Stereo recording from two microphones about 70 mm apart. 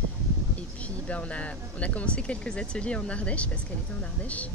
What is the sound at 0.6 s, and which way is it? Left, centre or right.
Speech, centre.